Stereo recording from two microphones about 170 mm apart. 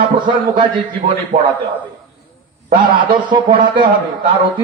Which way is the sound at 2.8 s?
30° right (ahead or behind).